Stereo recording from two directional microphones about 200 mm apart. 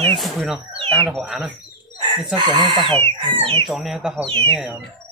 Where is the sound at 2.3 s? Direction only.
20° right (ahead or behind).